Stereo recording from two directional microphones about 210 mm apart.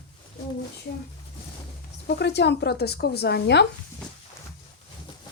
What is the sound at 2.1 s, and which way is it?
Speech, 55° left (ahead or behind).